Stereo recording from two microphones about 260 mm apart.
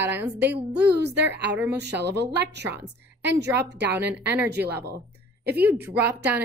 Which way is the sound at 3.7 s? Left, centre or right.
Right.